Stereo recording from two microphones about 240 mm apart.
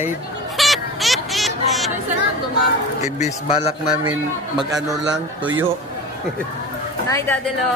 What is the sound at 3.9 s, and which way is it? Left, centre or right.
Speech, centre.